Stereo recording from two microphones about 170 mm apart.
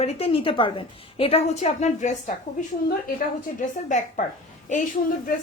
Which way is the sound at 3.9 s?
45° left (ahead or behind).